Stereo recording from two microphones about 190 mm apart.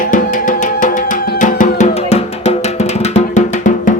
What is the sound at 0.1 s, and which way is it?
Music, 45° left (ahead or behind).